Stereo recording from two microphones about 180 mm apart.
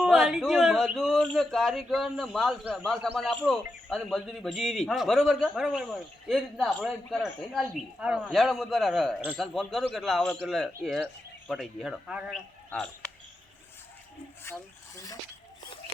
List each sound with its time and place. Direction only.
0.0 s a man's voice: centre (ahead or behind)
14.4 s speech: 15° left (ahead or behind)